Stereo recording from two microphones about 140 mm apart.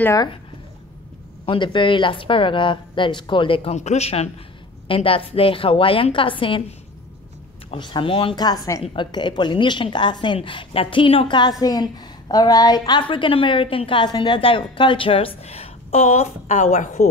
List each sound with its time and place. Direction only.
1.4 s a woman's voice: 35° left (ahead or behind)
3.7 s a woman's voice: 55° left (ahead or behind)
7.7 s a woman's voice: 35° left (ahead or behind); by 17.1 s 55° left (ahead or behind)